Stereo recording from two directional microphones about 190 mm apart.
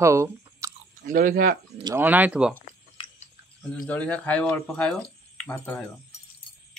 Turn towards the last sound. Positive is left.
turn(degrees=5)  # may be behind; listen again after turning